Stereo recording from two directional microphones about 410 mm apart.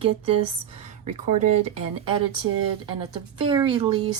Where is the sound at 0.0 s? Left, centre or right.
Centre.